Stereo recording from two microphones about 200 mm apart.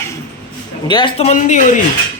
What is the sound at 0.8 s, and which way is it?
Speech, 25° left (ahead or behind).